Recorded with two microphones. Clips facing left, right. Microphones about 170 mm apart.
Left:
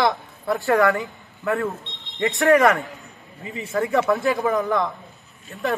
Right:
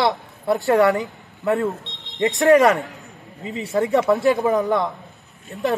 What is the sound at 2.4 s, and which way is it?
Speech, 30° right (ahead or behind).